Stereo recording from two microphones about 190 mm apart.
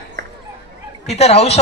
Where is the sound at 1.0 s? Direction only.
35° left (ahead or behind).